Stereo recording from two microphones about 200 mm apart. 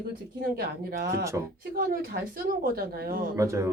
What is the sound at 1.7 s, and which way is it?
Speech, 45° right (ahead or behind).